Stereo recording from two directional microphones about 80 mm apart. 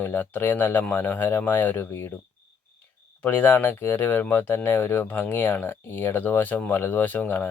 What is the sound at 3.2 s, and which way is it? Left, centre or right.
Speech, left.